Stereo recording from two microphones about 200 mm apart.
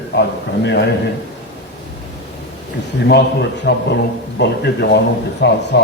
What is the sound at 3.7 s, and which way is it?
A man's voice, 55° left (ahead or behind).